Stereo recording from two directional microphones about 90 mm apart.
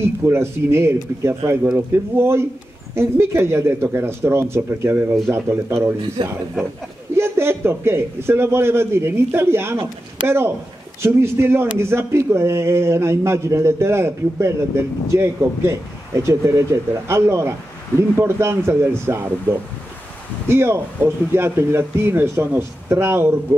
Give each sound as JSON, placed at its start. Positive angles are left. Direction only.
{"t": 0.0, "sound": "a man's voice", "side_deg": -30}
{"t": 6.2, "sound": "speech", "side_deg": -60}
{"t": 7.2, "sound": "a man's voice", "side_deg": -30}